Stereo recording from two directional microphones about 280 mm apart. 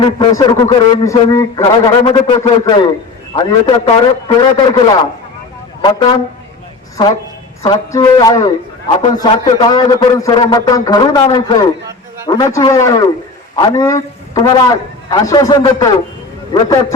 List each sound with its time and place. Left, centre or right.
0.0 s a man's voice: centre
5.8 s a man's voice: centre
7.6 s a man's voice: centre